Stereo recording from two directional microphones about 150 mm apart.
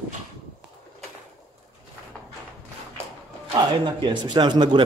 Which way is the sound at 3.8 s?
30° right (ahead or behind).